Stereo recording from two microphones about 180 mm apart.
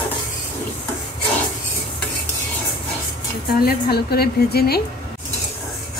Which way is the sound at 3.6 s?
60° left (ahead or behind).